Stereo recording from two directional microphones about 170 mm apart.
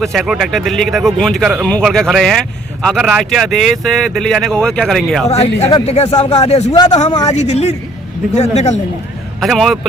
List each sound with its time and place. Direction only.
0.0 s speech: centre (ahead or behind)
5.5 s speech: 35° left (ahead or behind)
6.7 s a man's voice: 25° left (ahead or behind)
7.3 s speech: 40° left (ahead or behind)
9.4 s speech: centre (ahead or behind)